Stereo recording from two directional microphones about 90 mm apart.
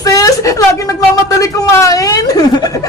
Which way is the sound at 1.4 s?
40° left (ahead or behind).